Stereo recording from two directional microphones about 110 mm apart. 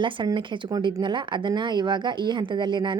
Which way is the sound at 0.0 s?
50° right (ahead or behind).